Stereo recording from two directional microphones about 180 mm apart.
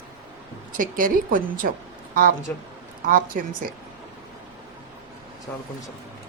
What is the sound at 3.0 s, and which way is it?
Speech, 50° right (ahead or behind).